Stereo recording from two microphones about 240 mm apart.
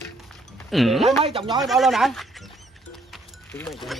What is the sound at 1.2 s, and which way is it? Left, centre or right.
Speech, right.